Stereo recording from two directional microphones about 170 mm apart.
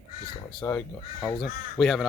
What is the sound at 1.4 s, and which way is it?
Speech, centre (ahead or behind).